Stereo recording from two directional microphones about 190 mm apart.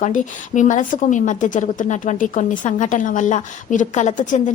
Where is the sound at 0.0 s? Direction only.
40° left (ahead or behind).